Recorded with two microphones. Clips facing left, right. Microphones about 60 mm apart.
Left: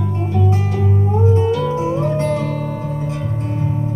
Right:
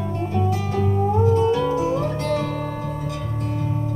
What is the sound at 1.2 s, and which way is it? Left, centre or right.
Music, left.